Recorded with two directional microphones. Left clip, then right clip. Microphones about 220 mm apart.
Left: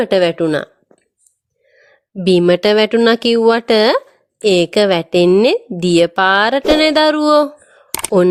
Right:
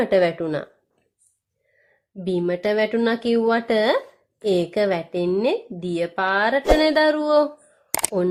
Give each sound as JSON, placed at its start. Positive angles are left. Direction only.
{"t": 0.0, "sound": "speech", "side_deg": 35}
{"t": 2.1, "sound": "speech", "side_deg": 40}